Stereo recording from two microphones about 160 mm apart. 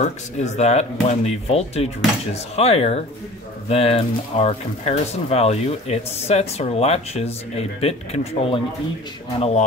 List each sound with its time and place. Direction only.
0.4 s speech: 40° left (ahead or behind)